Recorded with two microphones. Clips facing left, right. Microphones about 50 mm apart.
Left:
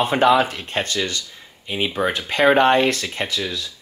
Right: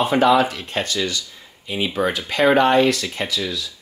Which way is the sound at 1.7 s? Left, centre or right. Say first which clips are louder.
Even; left.